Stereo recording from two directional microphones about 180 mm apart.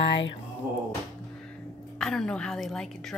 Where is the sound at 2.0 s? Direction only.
5° left (ahead or behind).